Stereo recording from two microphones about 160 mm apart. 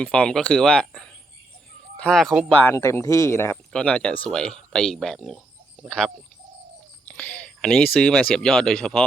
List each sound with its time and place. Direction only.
0.0 s speech: 5° left (ahead or behind)
2.5 s speech: 10° left (ahead or behind)
3.7 s speech: 5° left (ahead or behind)
7.0 s a sound: 5° left (ahead or behind)
7.9 s speech: 5° left (ahead or behind)